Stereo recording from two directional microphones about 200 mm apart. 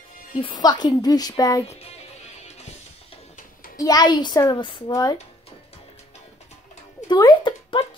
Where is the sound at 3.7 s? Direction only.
20° left (ahead or behind).